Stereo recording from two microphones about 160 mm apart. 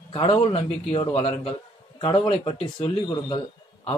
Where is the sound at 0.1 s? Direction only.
35° left (ahead or behind).